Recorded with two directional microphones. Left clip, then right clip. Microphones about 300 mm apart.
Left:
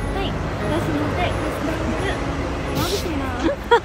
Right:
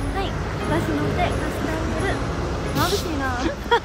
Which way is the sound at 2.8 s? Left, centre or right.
Centre.